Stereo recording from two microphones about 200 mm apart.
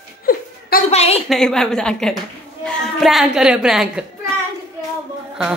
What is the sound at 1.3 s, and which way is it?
A woman's voice, 5° left (ahead or behind).